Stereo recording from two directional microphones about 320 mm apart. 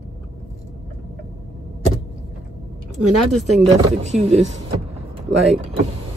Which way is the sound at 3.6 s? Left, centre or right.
Centre.